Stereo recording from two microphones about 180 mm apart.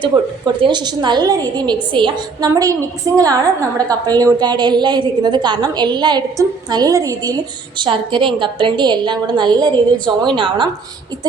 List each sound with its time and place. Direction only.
0.0 s a woman's voice: 25° right (ahead or behind)